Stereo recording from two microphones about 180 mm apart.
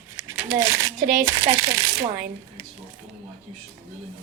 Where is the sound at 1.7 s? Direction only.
15° right (ahead or behind).